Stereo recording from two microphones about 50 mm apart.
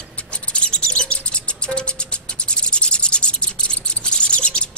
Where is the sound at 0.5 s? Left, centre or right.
Left.